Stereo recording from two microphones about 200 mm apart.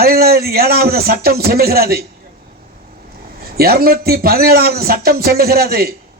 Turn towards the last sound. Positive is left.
turn(degrees=-50)  # may be behind; listen again after turning